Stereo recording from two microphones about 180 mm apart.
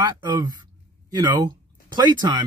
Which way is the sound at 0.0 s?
25° right (ahead or behind).